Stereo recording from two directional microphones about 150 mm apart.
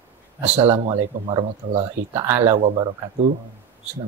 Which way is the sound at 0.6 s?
35° right (ahead or behind).